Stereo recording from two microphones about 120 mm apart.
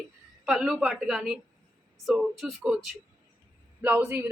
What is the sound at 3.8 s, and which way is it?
Speech, 15° right (ahead or behind).